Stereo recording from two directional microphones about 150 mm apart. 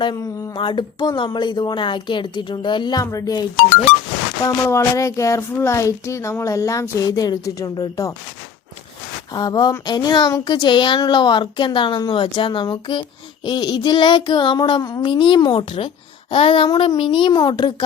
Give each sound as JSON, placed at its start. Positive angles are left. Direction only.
{"t": 0.0, "sound": "speech", "side_deg": 25}
{"t": 4.4, "sound": "speech", "side_deg": 20}
{"t": 9.3, "sound": "speech", "side_deg": 25}